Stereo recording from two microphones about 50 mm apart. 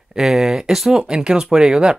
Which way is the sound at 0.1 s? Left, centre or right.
Centre.